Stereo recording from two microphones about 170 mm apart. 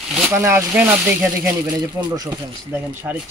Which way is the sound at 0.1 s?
10° right (ahead or behind).